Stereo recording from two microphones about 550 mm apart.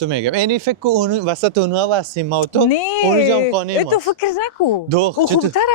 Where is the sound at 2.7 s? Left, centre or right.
Left.